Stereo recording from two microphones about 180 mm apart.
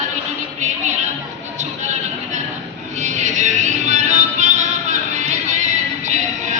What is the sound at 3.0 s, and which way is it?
Music, 40° right (ahead or behind).